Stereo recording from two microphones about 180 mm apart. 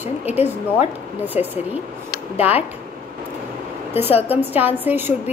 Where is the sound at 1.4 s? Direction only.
35° left (ahead or behind).